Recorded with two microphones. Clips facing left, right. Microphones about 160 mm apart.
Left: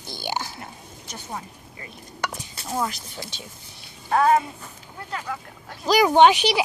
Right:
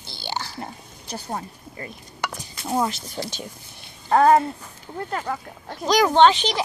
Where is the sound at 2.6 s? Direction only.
25° right (ahead or behind).